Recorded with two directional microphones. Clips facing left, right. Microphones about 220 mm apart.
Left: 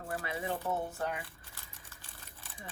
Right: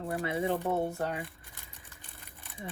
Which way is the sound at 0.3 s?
30° right (ahead or behind).